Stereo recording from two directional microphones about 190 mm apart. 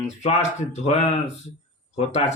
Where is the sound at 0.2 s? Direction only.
35° left (ahead or behind).